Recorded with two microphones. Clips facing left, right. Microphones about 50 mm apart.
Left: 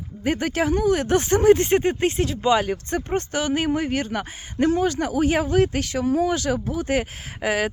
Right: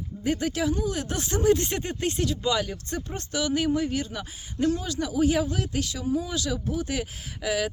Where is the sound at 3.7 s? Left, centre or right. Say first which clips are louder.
Left 3 dB; left.